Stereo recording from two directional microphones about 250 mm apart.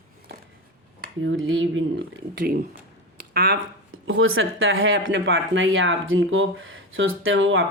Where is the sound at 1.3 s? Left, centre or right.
Right.